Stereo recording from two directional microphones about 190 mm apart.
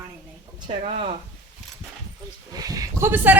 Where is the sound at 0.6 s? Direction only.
35° right (ahead or behind).